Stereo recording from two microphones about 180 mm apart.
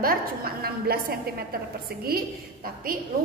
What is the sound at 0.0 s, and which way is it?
A woman's voice, 55° right (ahead or behind).